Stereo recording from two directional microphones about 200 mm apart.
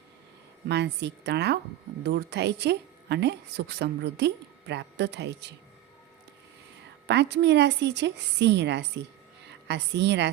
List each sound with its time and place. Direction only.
0.7 s a woman's voice: 60° right (ahead or behind)
7.1 s a woman's voice: 60° right (ahead or behind)